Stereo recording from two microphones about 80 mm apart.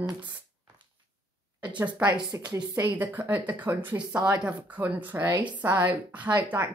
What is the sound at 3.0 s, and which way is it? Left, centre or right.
Speech, right.